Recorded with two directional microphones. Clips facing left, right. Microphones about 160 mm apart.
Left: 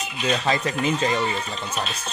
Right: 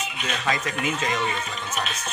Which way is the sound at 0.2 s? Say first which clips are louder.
Left 5 dB; 30° left (ahead or behind).